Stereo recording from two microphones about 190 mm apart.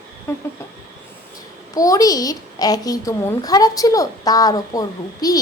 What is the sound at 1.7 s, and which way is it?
A child's voice, 20° left (ahead or behind).